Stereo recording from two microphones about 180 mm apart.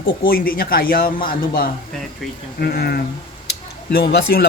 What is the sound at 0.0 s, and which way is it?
A man's voice, 55° left (ahead or behind).